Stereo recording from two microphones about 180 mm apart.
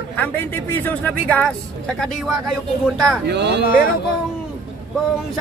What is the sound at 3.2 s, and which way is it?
Speech, 70° right (ahead or behind).